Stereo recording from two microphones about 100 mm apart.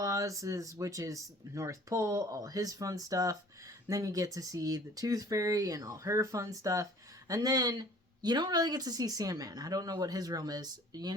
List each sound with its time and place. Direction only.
0.0 s speech: 35° right (ahead or behind)